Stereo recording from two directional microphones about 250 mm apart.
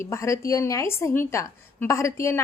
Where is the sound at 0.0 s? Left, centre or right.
Centre.